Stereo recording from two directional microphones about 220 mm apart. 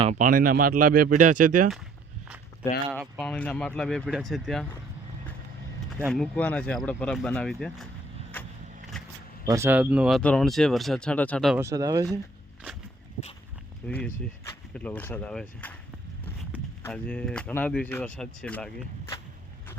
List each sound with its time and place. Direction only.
0.0 s speech: 35° right (ahead or behind)
3.2 s speech: 5° left (ahead or behind)
6.1 s speech: 5° left (ahead or behind)
9.5 s speech: 10° right (ahead or behind)
11.5 s speech: 15° right (ahead or behind)
13.8 s speech: 5° left (ahead or behind)
16.8 s speech: 5° left (ahead or behind)